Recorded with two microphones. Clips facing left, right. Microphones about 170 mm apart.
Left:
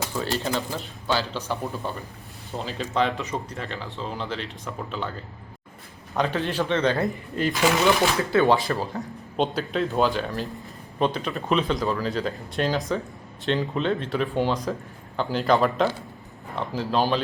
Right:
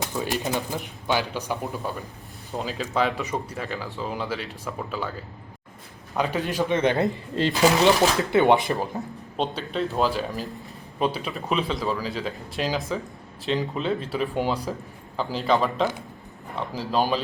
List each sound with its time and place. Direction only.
0.2 s speech: 15° right (ahead or behind)
2.6 s speech: 5° right (ahead or behind)
6.1 s speech: 10° right (ahead or behind); by 8.1 s 35° right (ahead or behind)
8.3 s speech: 20° right (ahead or behind)
9.4 s speech: centre (ahead or behind)